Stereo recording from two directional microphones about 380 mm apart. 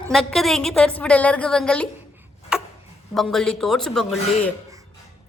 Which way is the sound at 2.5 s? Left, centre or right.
Centre.